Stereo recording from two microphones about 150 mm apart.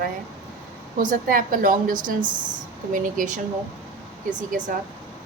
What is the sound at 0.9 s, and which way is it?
A woman's voice, 70° right (ahead or behind).